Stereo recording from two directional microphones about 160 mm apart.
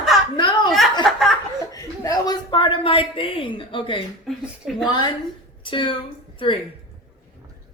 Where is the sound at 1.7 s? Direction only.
20° left (ahead or behind).